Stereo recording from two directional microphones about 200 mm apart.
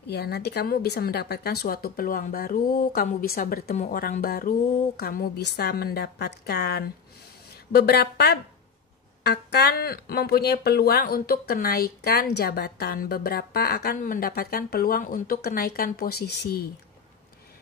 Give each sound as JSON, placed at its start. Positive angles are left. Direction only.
{"t": 0.1, "sound": "speech", "side_deg": 55}